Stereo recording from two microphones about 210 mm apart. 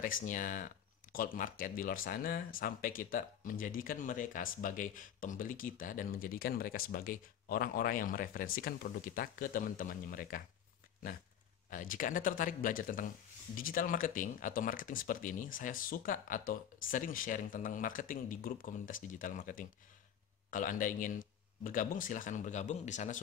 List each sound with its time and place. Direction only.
0.0 s speech: 40° left (ahead or behind)
11.7 s speech: 40° left (ahead or behind)